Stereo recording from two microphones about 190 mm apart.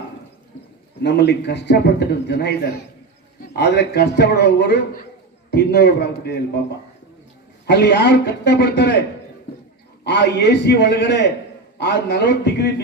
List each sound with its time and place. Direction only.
1.0 s a man's voice: 65° left (ahead or behind)
7.7 s a man's voice: 60° left (ahead or behind)